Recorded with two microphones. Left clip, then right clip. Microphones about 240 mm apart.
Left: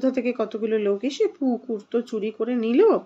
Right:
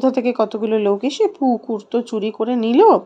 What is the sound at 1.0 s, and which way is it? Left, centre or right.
Speech, centre.